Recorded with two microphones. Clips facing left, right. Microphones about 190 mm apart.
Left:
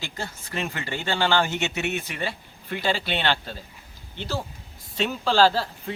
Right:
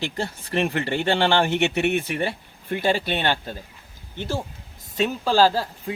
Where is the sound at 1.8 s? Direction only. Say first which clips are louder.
Right 6 dB; 55° right (ahead or behind).